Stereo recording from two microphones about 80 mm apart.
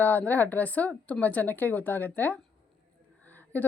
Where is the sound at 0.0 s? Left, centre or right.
Left.